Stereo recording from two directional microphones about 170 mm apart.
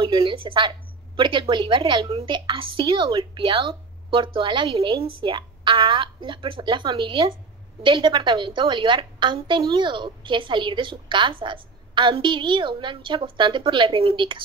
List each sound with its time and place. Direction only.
0.0 s a woman's voice: 30° right (ahead or behind)